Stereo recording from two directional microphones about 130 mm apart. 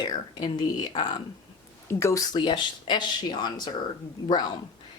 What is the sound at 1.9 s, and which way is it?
Speech, 20° left (ahead or behind).